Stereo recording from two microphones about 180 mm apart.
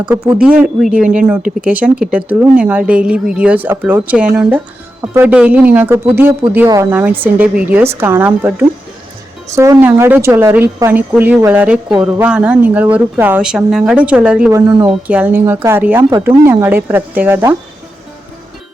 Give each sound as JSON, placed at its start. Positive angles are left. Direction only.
{"t": 0.1, "sound": "speech", "side_deg": -10}
{"t": 14.5, "sound": "speech", "side_deg": -20}
{"t": 15.0, "sound": "speech", "side_deg": -10}